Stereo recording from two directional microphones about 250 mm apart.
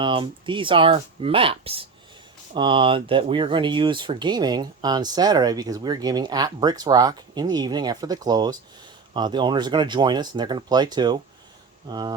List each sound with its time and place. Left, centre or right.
0.0 s speech: centre